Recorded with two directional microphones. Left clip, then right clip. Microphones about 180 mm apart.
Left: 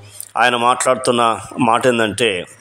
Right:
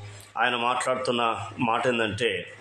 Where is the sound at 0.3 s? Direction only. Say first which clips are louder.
Left 10 dB; 40° left (ahead or behind).